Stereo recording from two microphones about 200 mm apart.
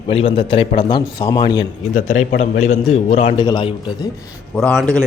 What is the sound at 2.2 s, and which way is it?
A man's voice, 35° left (ahead or behind).